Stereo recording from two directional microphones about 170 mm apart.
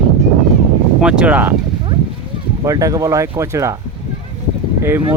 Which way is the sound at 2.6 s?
20° right (ahead or behind).